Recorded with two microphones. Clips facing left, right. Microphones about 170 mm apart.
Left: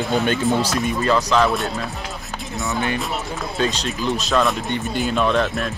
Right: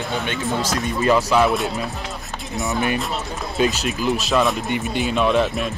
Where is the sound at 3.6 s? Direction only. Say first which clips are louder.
Right 3 dB; 10° right (ahead or behind).